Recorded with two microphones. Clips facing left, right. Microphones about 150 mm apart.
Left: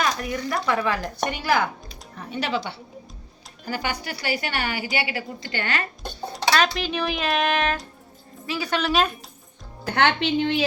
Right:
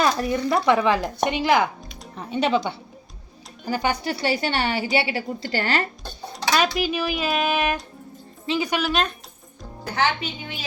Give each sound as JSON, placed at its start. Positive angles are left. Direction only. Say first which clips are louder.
{"t": 0.0, "sound": "a sound", "louder": "right 4 dB", "side_deg": -35}
{"t": 0.5, "sound": "a woman's voice", "louder": "right 5 dB", "side_deg": -25}
{"t": 3.7, "sound": "a woman's voice", "louder": "right 5 dB", "side_deg": -25}
{"t": 6.5, "sound": "a woman's voice", "louder": "right 1 dB", "side_deg": -10}
{"t": 8.8, "sound": "speech", "louder": "left 1 dB", "side_deg": 0}
{"t": 9.8, "sound": "a woman's voice", "louder": "left 3 dB", "side_deg": 65}